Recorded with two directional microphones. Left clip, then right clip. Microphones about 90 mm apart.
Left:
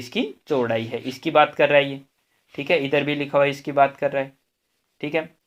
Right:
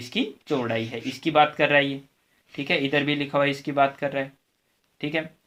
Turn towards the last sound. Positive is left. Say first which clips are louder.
# left 3 dB
turn(degrees=35)  # may be behind; listen again after turning